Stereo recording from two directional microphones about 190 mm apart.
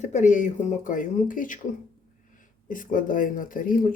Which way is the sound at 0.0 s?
40° left (ahead or behind).